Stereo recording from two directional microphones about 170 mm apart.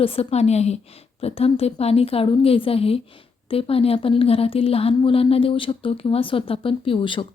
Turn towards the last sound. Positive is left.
turn(degrees=30)  # may be behind; listen again after turning